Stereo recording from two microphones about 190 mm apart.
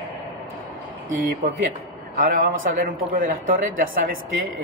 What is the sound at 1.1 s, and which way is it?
Speech, 45° right (ahead or behind).